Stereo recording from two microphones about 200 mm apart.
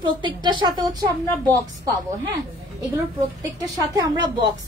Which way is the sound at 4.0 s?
20° right (ahead or behind).